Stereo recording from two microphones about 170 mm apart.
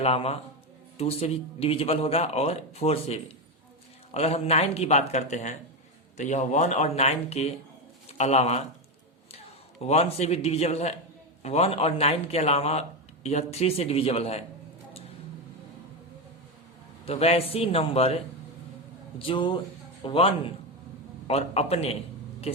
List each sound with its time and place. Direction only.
0.0 s speech: 35° left (ahead or behind)
9.8 s speech: 40° left (ahead or behind)
17.1 s speech: 35° left (ahead or behind)
19.2 s speech: 30° left (ahead or behind)